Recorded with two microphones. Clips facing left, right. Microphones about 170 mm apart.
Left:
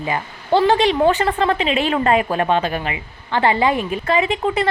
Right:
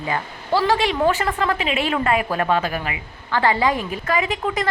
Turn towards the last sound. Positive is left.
turn(degrees=30)  # may be behind; listen again after turning